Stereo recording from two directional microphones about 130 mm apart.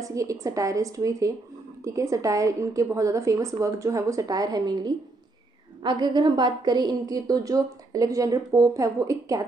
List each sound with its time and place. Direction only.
0.0 s a woman's voice: 25° right (ahead or behind)